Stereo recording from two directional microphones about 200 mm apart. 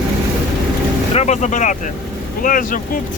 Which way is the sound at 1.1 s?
35° left (ahead or behind).